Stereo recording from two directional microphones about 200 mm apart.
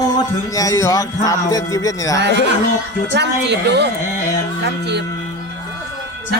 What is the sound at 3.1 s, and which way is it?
Speech, 60° right (ahead or behind).